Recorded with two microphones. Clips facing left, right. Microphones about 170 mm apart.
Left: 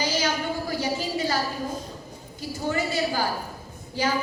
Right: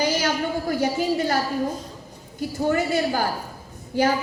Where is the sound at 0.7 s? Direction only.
55° right (ahead or behind).